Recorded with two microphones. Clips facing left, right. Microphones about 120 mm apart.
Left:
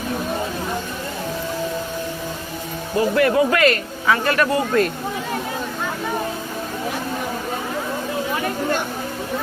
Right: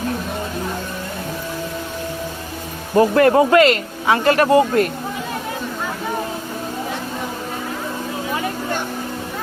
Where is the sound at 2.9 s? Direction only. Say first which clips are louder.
Right 4 dB; 45° right (ahead or behind).